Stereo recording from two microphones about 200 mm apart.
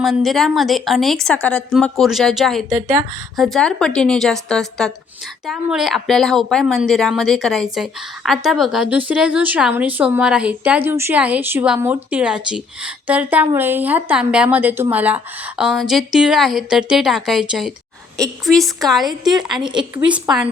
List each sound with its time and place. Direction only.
0.0 s a woman's voice: centre (ahead or behind)
19.0 s a woman's voice: 20° right (ahead or behind)
20.1 s a woman's voice: 5° right (ahead or behind)